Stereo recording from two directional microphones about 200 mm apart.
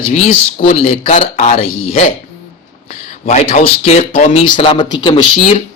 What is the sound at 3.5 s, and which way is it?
Speech, 35° left (ahead or behind).